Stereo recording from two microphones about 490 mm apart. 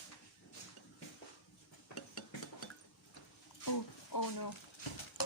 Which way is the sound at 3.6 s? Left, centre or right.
Left.